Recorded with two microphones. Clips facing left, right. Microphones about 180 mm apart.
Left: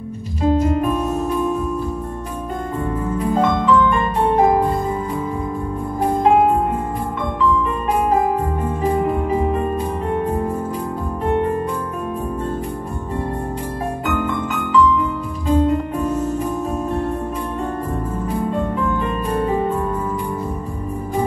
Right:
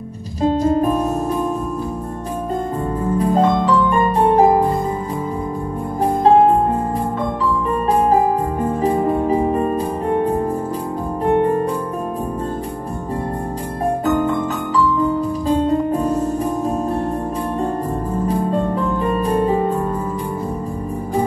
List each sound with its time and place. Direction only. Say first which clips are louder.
0.4 s music: right 1 dB; 35° right (ahead or behind)
3.2 s music: right 3 dB; 35° right (ahead or behind)
8.1 s music: right 2 dB; 35° right (ahead or behind)
14.0 s music: right 4 dB; 35° right (ahead or behind)
18.2 s music: right 3 dB; 35° right (ahead or behind)